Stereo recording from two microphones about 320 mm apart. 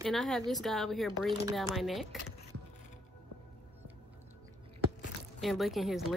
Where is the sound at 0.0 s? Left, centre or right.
Centre.